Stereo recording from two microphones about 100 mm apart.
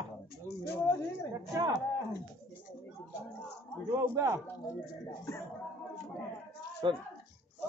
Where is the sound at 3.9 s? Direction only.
25° right (ahead or behind).